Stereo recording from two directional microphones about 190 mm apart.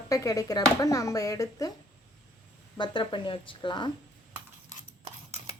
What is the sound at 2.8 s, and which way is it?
Speech, 25° left (ahead or behind).